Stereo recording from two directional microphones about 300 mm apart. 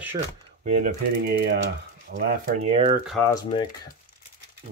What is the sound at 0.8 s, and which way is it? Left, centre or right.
Speech, right.